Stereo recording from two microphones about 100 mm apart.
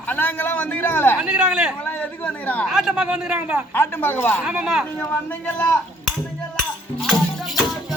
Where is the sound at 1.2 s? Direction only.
10° right (ahead or behind).